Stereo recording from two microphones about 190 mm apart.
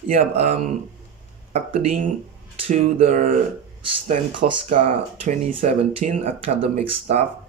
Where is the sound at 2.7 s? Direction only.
40° right (ahead or behind).